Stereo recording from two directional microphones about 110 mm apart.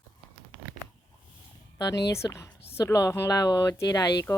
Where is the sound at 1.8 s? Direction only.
35° left (ahead or behind).